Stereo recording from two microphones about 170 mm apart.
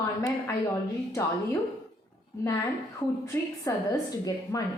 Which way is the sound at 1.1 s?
15° left (ahead or behind).